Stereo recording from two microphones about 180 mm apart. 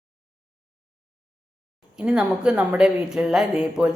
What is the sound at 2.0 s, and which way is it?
A woman's voice, 5° right (ahead or behind).